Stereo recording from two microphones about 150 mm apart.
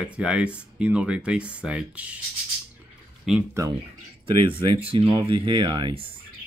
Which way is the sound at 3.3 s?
Centre (ahead or behind).